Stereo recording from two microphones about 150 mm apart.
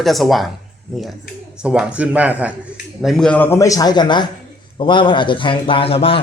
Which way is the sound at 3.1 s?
5° left (ahead or behind).